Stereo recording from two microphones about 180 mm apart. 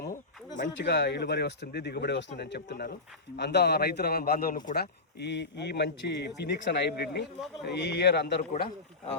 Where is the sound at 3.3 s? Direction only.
70° left (ahead or behind).